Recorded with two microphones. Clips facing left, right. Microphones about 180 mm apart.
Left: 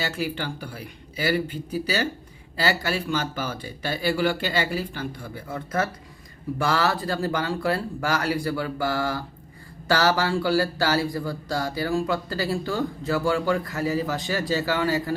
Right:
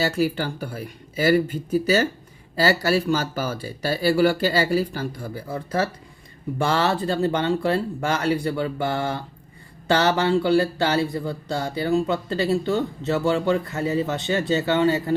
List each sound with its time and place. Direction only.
0.0 s speech: 40° right (ahead or behind); by 15.1 s 25° right (ahead or behind)